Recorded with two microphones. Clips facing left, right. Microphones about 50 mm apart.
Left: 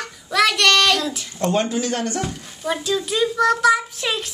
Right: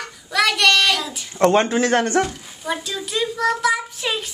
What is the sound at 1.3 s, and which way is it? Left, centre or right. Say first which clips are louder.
Speech: right 5 dB; right.